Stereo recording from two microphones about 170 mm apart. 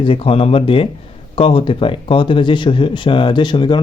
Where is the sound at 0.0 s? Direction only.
35° left (ahead or behind).